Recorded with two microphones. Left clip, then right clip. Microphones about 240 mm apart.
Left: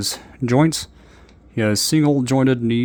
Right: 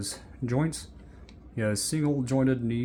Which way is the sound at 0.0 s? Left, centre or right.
Left.